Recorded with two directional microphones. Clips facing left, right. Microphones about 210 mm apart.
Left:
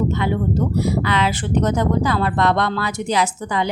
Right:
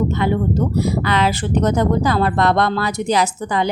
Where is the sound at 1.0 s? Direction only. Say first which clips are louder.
Right 2 dB; 40° right (ahead or behind).